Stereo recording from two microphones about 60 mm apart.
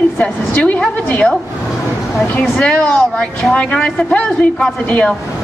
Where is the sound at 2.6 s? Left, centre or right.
Centre.